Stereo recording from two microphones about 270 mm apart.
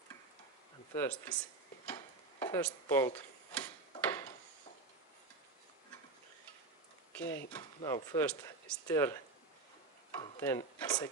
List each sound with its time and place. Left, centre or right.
0.9 s speech: centre
2.4 s speech: centre
4.0 s a sound: centre
7.1 s a sound: centre
7.8 s speech: centre
10.2 s speech: centre